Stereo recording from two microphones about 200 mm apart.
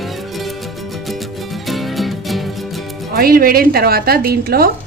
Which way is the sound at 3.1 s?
45° right (ahead or behind).